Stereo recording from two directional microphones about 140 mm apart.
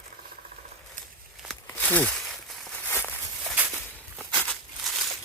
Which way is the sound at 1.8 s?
10° left (ahead or behind).